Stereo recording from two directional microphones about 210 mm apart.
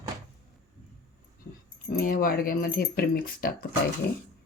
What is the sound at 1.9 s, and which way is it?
Speech, 45° left (ahead or behind).